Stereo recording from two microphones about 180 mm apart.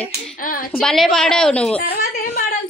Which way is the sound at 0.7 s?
Centre (ahead or behind).